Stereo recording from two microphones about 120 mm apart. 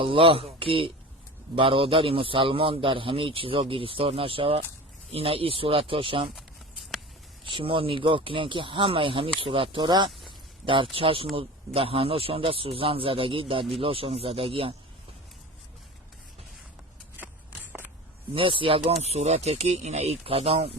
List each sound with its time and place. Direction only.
0.0 s speech: 50° right (ahead or behind)
6.3 s a sound: centre (ahead or behind)
7.4 s speech: 45° right (ahead or behind)
10.9 s speech: 50° right (ahead or behind)
18.3 s speech: 45° right (ahead or behind)